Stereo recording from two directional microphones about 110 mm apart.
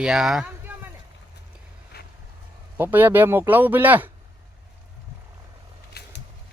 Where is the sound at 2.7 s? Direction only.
15° right (ahead or behind).